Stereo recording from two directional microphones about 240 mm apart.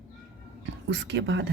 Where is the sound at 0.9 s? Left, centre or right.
Right.